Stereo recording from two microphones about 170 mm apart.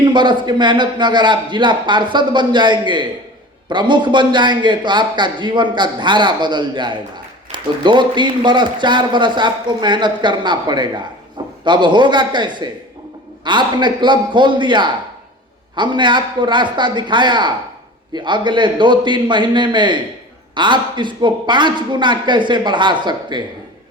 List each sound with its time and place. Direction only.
0.0 s a man's voice: 25° right (ahead or behind)